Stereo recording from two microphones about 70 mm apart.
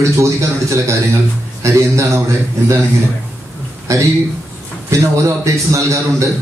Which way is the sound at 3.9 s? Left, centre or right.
Right.